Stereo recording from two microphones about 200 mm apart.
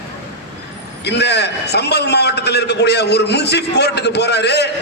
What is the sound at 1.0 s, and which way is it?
A man's voice, 60° left (ahead or behind).